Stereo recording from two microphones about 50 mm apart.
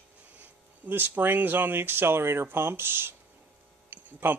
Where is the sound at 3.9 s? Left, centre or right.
Right.